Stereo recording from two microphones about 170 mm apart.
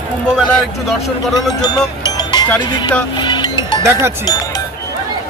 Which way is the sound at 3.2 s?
25° left (ahead or behind).